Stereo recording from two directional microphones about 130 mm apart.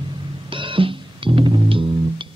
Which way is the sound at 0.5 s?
40° right (ahead or behind).